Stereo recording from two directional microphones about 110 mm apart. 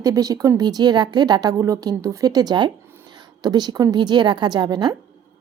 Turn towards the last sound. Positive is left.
turn(degrees=-40)  # may be behind; listen again after turning